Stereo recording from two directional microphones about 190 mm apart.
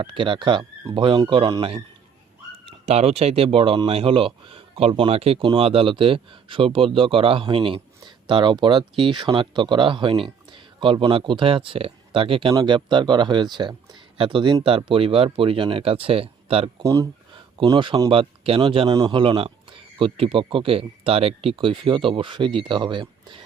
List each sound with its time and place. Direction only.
0.0 s speech: 25° right (ahead or behind)
16.8 s speech: 20° right (ahead or behind)